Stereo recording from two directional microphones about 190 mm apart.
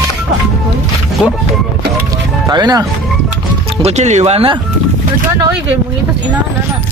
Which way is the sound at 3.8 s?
35° right (ahead or behind).